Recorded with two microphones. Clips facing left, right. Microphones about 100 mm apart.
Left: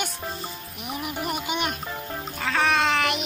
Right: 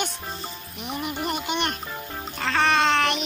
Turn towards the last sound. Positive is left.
turn(degrees=5)  # may be behind; listen again after turning